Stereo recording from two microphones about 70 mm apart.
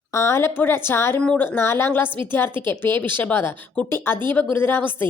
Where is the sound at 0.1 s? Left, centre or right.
Left.